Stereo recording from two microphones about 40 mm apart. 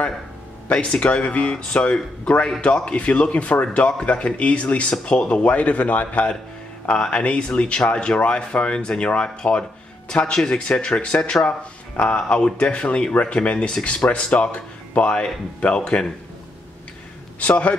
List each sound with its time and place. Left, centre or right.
0.7 s speech: left
17.4 s speech: left